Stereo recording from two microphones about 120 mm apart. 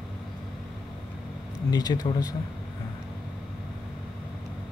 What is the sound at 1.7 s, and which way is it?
Speech, 35° left (ahead or behind).